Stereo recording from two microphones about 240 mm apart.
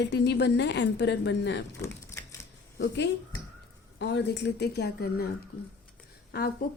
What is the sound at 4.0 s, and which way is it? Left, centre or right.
A woman's voice, left.